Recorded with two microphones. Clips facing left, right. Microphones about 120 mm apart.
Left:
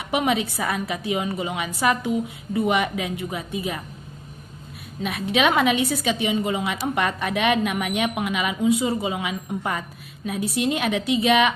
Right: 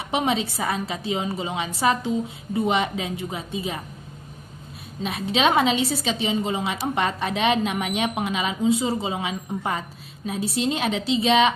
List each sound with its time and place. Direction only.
0.1 s a woman's voice: 25° right (ahead or behind)
5.0 s a woman's voice: 25° right (ahead or behind)